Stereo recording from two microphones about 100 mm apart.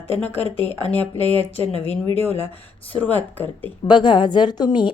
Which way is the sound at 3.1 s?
20° left (ahead or behind).